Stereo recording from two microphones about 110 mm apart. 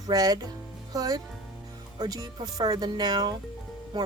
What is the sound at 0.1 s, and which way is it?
Speech, 35° right (ahead or behind).